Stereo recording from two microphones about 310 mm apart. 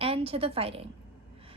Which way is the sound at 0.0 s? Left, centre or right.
Centre.